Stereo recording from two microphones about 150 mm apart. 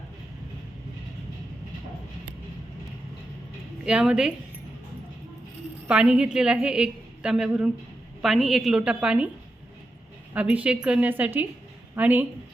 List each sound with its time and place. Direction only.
3.8 s a woman's voice: 5° right (ahead or behind)
5.9 s a woman's voice: 5° right (ahead or behind)
10.3 s a woman's voice: 10° right (ahead or behind)